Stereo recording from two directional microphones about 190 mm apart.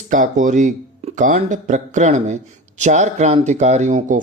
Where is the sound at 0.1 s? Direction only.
40° right (ahead or behind).